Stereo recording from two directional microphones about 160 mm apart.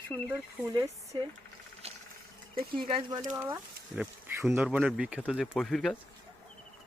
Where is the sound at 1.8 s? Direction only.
40° right (ahead or behind).